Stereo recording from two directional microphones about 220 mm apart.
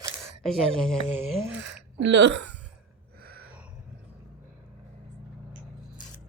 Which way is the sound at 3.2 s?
45° right (ahead or behind).